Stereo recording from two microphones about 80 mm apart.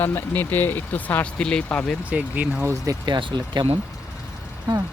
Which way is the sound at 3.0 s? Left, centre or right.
Right.